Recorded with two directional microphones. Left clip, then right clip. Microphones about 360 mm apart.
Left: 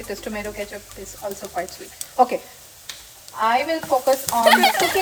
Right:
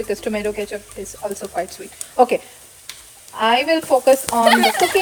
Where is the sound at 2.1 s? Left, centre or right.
Right.